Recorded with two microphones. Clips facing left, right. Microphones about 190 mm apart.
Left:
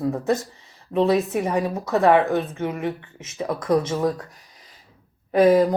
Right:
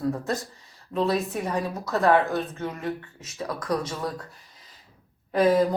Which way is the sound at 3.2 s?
25° left (ahead or behind).